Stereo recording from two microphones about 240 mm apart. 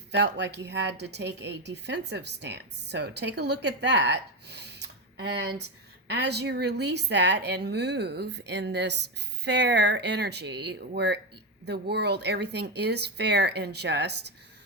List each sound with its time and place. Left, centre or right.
0.1 s a woman's voice: right